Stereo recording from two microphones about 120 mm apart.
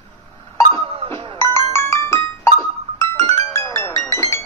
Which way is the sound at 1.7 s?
20° left (ahead or behind).